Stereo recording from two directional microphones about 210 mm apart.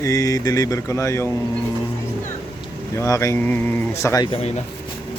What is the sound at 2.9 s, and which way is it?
Speech, 15° left (ahead or behind).